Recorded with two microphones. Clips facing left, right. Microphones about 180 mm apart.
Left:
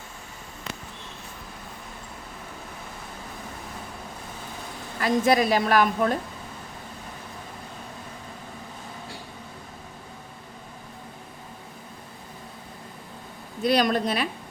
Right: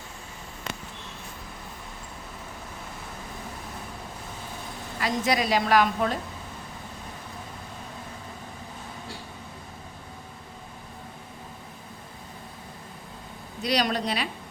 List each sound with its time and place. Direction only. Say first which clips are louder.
4.9 s a woman's voice: left 5 dB; 50° left (ahead or behind)
13.6 s a woman's voice: left 4 dB; 50° left (ahead or behind)